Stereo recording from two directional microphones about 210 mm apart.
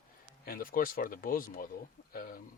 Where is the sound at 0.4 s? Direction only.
45° left (ahead or behind).